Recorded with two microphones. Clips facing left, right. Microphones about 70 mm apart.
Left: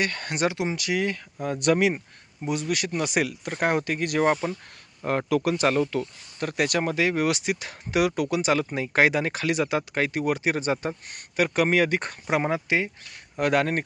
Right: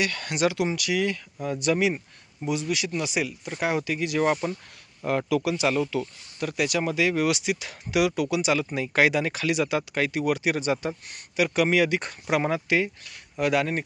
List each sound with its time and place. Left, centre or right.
0.0 s speech: left
4.4 s speech: left
5.0 s speech: left
12.5 s speech: left
13.4 s speech: left